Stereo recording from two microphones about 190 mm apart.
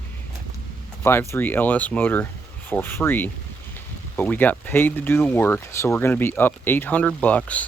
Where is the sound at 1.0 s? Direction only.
10° left (ahead or behind).